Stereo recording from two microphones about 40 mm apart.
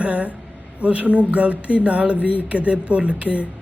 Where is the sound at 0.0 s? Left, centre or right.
Right.